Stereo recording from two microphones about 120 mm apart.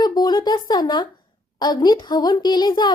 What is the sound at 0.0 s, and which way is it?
A woman's voice, 35° left (ahead or behind).